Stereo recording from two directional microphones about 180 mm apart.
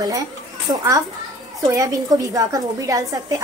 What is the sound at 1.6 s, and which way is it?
A woman's voice, 20° right (ahead or behind).